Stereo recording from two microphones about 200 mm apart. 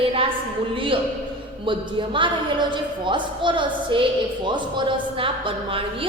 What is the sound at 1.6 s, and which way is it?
A woman's voice, 25° right (ahead or behind).